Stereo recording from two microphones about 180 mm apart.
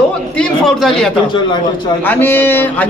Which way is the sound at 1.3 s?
25° left (ahead or behind).